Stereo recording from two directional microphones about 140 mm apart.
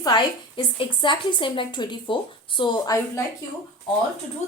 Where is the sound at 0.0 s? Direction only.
35° left (ahead or behind).